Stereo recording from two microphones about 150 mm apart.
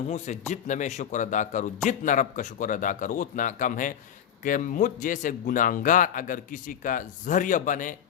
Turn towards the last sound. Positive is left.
turn(degrees=60)  # may be behind; listen again after turning